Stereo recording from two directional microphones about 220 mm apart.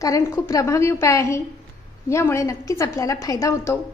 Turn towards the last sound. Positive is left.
turn(degrees=15)  # may be behind; listen again after turning